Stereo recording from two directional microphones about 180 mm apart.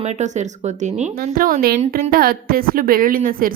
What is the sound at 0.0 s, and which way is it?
A woman's voice, 40° right (ahead or behind).